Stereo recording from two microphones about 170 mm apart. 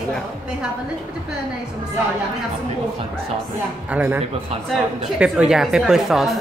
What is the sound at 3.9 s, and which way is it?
Speech, 10° right (ahead or behind).